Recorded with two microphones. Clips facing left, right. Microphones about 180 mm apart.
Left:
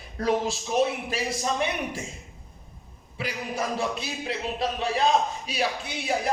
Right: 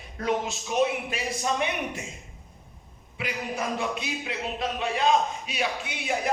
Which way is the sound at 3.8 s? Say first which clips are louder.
Left 1 dB; 35° left (ahead or behind).